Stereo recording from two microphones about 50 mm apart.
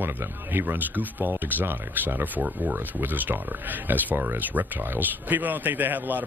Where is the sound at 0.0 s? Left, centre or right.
Right.